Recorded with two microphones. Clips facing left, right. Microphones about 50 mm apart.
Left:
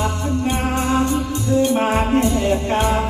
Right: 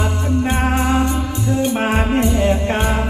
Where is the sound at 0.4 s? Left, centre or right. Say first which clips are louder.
Right 2 dB; right.